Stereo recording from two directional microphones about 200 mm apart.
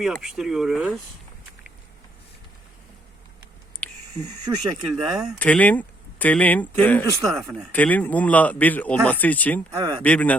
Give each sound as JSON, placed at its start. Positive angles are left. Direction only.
{"t": 0.0, "sound": "speech", "side_deg": 0}
{"t": 3.8, "sound": "a sound", "side_deg": 5}
{"t": 4.5, "sound": "speech", "side_deg": -15}
{"t": 4.9, "sound": "speech", "side_deg": 5}